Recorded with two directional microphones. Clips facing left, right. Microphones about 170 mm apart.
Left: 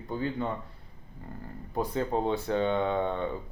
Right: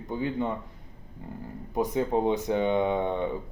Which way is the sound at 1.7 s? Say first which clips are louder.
Right 3 dB; 15° right (ahead or behind).